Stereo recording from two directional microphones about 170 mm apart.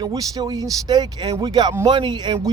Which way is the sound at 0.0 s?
20° right (ahead or behind).